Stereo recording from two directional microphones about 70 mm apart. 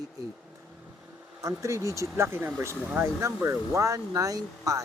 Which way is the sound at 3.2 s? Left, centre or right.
Right.